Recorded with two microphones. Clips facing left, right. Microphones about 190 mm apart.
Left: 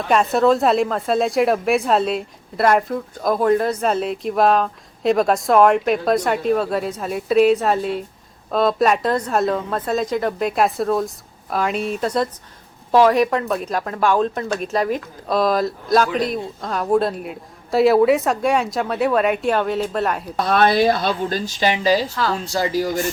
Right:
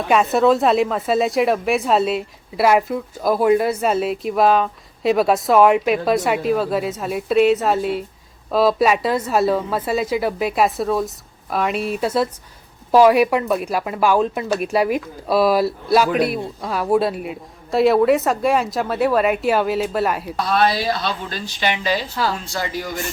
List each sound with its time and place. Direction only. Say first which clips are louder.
0.1 s speech: even; 5° right (ahead or behind)
20.5 s a woman's voice: left 3 dB; 55° left (ahead or behind); by 22.9 s 35° left (ahead or behind)